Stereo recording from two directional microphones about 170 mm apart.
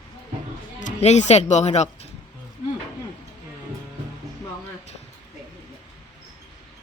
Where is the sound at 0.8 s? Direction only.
40° left (ahead or behind).